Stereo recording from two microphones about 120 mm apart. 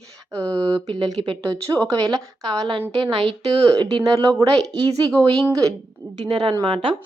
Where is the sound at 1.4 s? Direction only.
30° right (ahead or behind); by 3.3 s 45° right (ahead or behind).